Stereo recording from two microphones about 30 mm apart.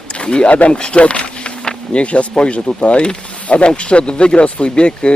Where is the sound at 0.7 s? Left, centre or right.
Left.